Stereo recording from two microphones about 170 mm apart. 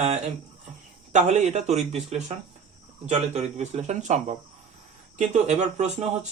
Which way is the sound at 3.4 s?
40° right (ahead or behind).